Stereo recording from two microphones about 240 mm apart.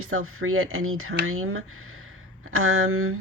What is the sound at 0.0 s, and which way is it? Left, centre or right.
Speech, right.